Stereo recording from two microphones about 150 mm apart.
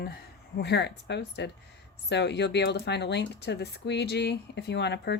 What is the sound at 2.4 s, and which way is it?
Speech, 90° left.